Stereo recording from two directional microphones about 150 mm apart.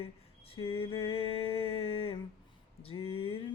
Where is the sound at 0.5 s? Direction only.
40° left (ahead or behind).